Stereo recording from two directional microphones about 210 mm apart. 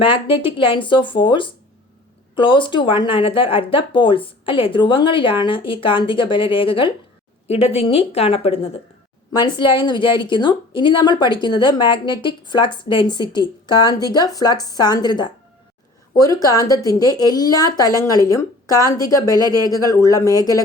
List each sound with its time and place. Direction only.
0.0 s speech: 25° left (ahead or behind)